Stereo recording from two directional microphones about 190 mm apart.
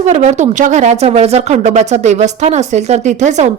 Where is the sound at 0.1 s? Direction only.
40° right (ahead or behind).